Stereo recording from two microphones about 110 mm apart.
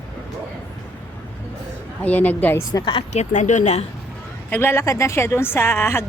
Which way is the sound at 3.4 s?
90° left.